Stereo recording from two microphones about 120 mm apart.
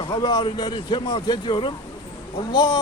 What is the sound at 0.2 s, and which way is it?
A man's voice, 40° left (ahead or behind).